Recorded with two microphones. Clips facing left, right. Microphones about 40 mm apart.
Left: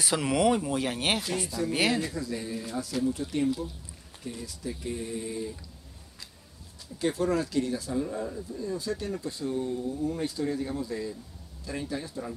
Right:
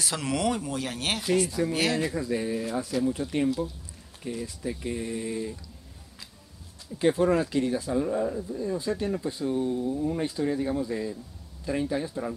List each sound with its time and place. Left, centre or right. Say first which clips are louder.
0.0 s speech: left 3 dB; centre
2.0 s speech: right 4 dB; centre
7.0 s speech: right 4 dB; right